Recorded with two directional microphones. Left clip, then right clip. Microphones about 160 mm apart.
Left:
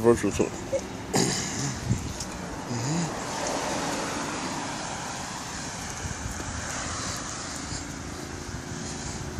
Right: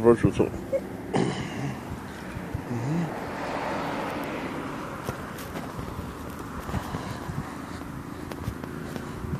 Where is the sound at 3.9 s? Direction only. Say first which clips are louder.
Even; 80° left.